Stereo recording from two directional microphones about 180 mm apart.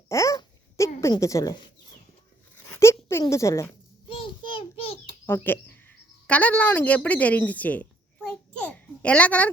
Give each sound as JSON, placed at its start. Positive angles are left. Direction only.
{"t": 0.1, "sound": "babbling", "side_deg": 15}
{"t": 1.0, "sound": "speech", "side_deg": 15}
{"t": 2.6, "sound": "a sound", "side_deg": 10}
{"t": 4.1, "sound": "child singing", "side_deg": 30}
{"t": 5.2, "sound": "speech", "side_deg": 10}
{"t": 8.5, "sound": "babbling", "side_deg": 10}